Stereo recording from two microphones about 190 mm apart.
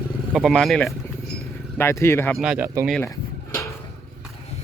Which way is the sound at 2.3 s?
5° right (ahead or behind).